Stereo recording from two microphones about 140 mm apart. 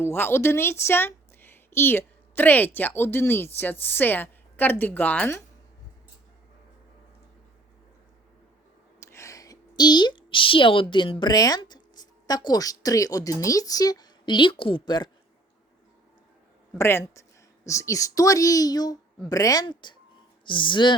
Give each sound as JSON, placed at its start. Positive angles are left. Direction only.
{"t": 0.0, "sound": "a woman's voice", "side_deg": 15}
{"t": 9.0, "sound": "a woman's voice", "side_deg": 20}
{"t": 16.7, "sound": "speech", "side_deg": 20}